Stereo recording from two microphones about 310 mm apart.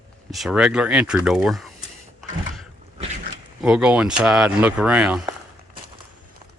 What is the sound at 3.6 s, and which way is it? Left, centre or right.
Speech, centre.